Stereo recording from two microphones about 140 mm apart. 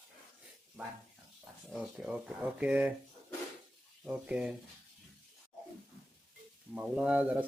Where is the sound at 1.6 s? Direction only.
5° right (ahead or behind).